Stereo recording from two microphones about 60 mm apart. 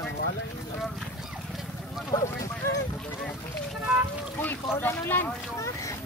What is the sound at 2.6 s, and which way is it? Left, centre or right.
Speech, left.